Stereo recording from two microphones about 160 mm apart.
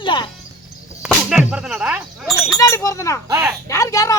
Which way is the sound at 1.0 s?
5° right (ahead or behind).